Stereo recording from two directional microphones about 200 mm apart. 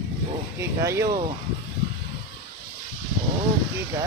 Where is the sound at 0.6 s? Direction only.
15° right (ahead or behind).